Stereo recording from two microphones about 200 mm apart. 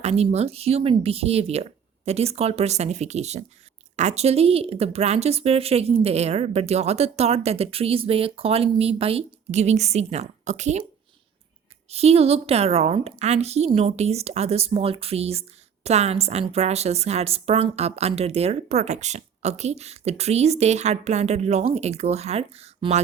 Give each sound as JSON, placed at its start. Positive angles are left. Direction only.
{"t": 0.0, "sound": "speech", "side_deg": -30}
{"t": 11.9, "sound": "speech", "side_deg": -30}